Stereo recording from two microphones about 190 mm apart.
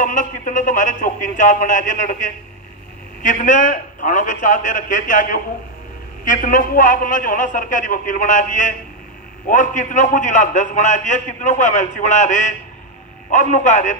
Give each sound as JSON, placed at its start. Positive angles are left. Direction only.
{"t": 0.0, "sound": "a man's voice", "side_deg": 45}